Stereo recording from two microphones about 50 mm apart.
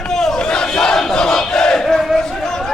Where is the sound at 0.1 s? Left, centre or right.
Centre.